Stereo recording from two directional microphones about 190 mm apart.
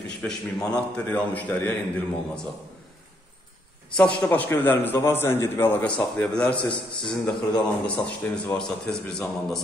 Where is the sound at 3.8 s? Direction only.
5° left (ahead or behind).